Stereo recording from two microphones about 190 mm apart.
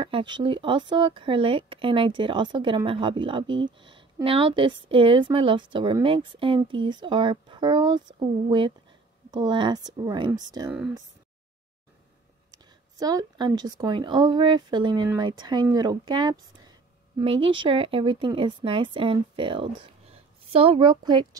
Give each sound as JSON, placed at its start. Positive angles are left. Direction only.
{"t": 0.0, "sound": "speech", "side_deg": -25}
{"t": 13.0, "sound": "speech", "side_deg": -20}